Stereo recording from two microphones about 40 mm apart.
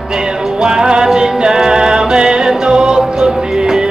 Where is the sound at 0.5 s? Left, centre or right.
Centre.